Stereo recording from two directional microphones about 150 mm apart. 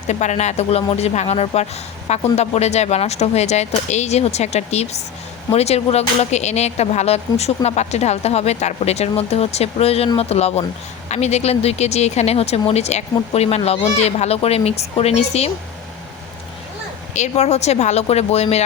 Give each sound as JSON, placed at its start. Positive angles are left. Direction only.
{"t": 0.1, "sound": "speech", "side_deg": 50}
{"t": 17.2, "sound": "speech", "side_deg": 45}